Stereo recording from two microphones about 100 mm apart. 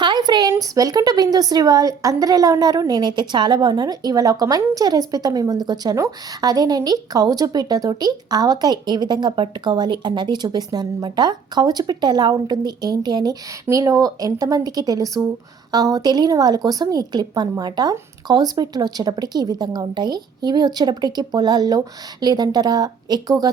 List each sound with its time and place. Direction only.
0.0 s a sound: 45° right (ahead or behind)
0.8 s speech: 40° right (ahead or behind)
13.7 s speech: 35° right (ahead or behind)